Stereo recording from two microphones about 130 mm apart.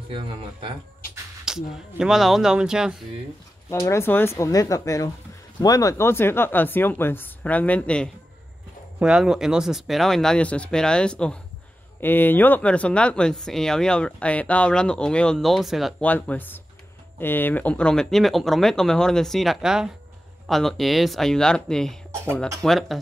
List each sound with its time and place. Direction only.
0.1 s speech: 40° right (ahead or behind)
1.4 s speech: 5° right (ahead or behind)
3.8 s speech: 20° left (ahead or behind)
9.0 s speech: 5° right (ahead or behind)
16.0 s speech: 10° left (ahead or behind)